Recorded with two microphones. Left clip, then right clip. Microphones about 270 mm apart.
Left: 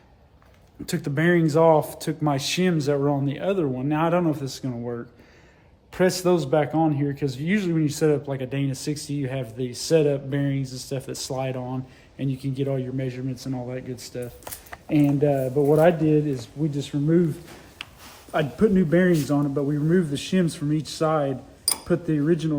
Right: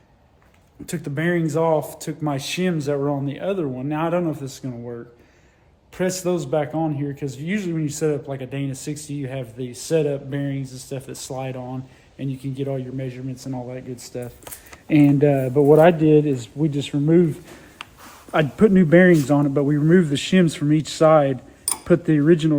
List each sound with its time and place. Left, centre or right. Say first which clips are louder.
0.9 s a man's voice: left 1 dB; centre
13.9 s speech: right 1 dB; centre
14.8 s a man's voice: right 5 dB; right